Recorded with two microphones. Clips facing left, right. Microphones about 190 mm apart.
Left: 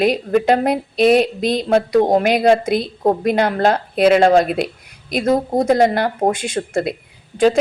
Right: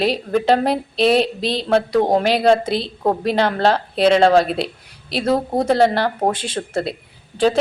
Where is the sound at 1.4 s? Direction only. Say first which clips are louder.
Left 3 dB; 30° right (ahead or behind).